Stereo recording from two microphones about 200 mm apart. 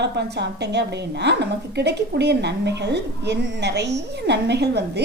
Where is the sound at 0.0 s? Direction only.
55° right (ahead or behind).